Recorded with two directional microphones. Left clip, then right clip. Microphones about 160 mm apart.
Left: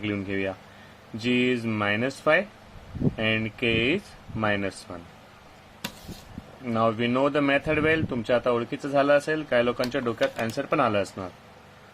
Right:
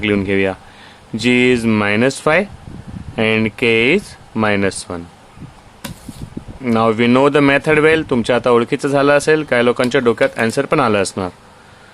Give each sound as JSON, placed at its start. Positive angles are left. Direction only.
{"t": 0.0, "sound": "speech", "side_deg": -45}
{"t": 6.7, "sound": "speech", "side_deg": -50}